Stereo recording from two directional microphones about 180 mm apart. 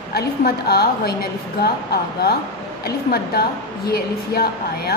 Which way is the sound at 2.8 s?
60° left (ahead or behind).